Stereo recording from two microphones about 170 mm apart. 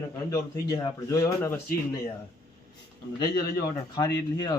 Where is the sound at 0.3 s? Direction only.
25° left (ahead or behind).